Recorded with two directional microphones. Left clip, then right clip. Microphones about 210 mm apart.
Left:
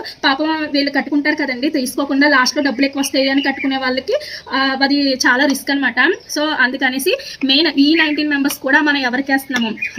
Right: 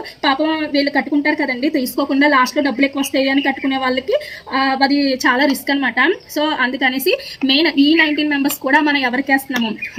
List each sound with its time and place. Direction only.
0.2 s speech: 5° left (ahead or behind)